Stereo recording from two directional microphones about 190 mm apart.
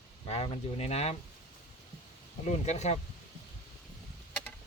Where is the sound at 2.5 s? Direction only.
35° left (ahead or behind).